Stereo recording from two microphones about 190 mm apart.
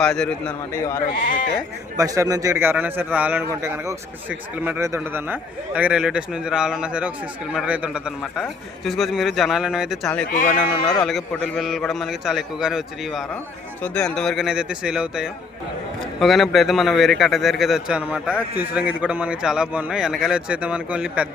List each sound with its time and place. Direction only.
0.0 s speech: 5° left (ahead or behind)
2.0 s a man's voice: 20° right (ahead or behind); by 10.2 s 5° left (ahead or behind)
10.3 s speech: 45° left (ahead or behind)
10.8 s speech: 25° left (ahead or behind)
11.0 s a man's voice: centre (ahead or behind)